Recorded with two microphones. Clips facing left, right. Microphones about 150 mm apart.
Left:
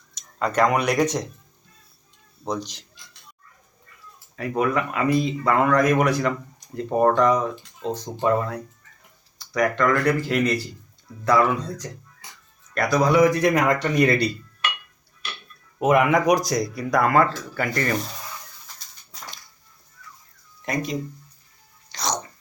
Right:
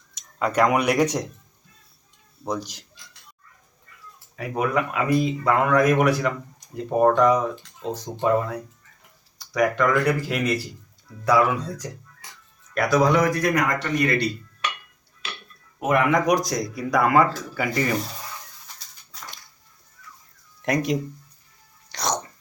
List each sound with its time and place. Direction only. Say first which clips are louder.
0.1 s speech: even; 10° right (ahead or behind)
2.4 s speech: even; 10° right (ahead or behind)
4.4 s speech: left 1 dB; 10° right (ahead or behind)
13.3 s speech: left 3 dB; 25° left (ahead or behind)
15.8 s speech: left 3 dB; 20° left (ahead or behind)
16.0 s speech: left 1 dB; 5° left (ahead or behind)
20.7 s speech: right 4 dB; 75° right (ahead or behind)
21.9 s dog: right 1 dB; 70° right (ahead or behind)